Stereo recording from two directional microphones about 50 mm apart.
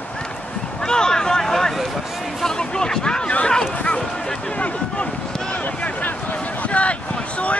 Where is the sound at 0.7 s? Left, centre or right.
Centre.